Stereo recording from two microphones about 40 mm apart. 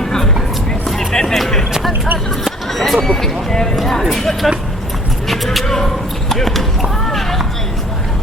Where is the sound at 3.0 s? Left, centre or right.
Centre.